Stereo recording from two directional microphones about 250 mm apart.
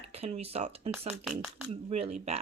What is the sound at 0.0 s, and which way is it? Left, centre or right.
Speech, right.